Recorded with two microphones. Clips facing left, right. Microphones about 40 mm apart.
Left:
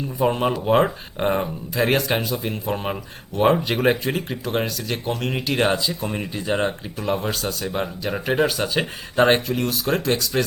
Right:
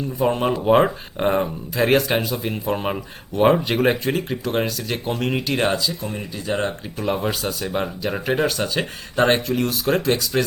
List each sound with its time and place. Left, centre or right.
0.2 s speech: centre
6.0 s speech: left
6.5 s speech: centre
7.0 s speech: centre